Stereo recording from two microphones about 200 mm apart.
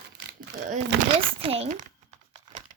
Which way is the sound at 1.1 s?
30° right (ahead or behind).